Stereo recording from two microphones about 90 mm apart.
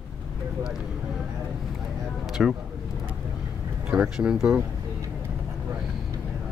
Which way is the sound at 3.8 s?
10° right (ahead or behind).